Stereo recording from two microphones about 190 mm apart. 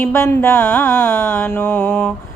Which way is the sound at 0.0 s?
15° left (ahead or behind).